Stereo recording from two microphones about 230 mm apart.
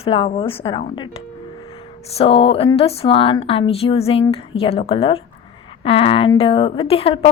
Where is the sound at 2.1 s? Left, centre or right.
Left.